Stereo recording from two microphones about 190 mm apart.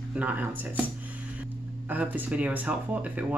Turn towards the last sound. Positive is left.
turn(degrees=-10)  # may be behind; listen again after turning